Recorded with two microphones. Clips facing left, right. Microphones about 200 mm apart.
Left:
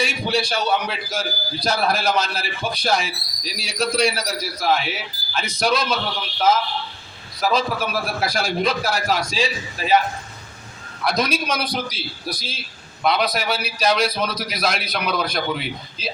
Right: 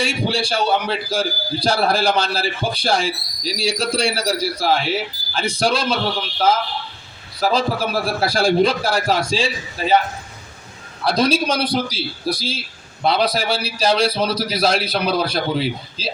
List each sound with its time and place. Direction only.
0.0 s a man's voice: 30° right (ahead or behind)
7.3 s a man's voice: 30° right (ahead or behind)
11.0 s a man's voice: 30° right (ahead or behind)